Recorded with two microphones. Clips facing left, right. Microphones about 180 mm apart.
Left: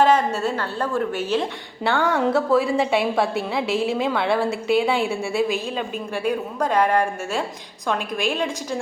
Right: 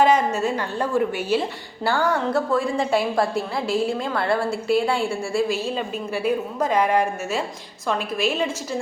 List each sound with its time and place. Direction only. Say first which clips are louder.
0.0 s a woman's voice: even; 10° right (ahead or behind)